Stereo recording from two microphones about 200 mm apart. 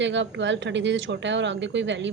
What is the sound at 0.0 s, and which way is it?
Speech, 65° right (ahead or behind).